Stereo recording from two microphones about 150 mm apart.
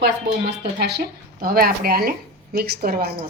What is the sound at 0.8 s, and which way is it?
Speech, 90° right.